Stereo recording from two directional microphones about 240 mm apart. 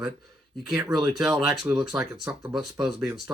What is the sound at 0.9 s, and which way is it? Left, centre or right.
Speech, centre.